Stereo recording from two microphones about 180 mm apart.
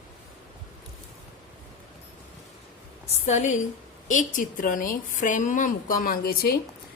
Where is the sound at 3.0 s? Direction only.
40° left (ahead or behind).